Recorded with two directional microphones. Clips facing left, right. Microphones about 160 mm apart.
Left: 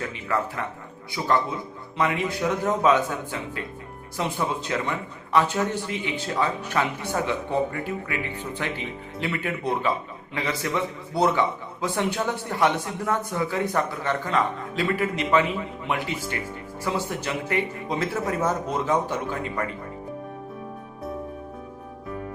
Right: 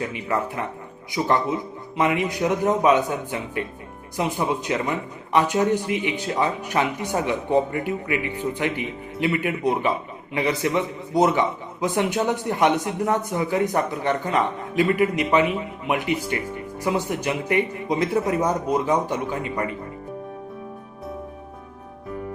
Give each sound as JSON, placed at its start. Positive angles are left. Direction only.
{"t": 0.1, "sound": "a man's voice", "side_deg": -20}
{"t": 16.8, "sound": "a man's voice", "side_deg": -15}